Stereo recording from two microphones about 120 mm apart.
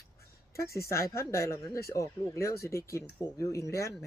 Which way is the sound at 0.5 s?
25° left (ahead or behind).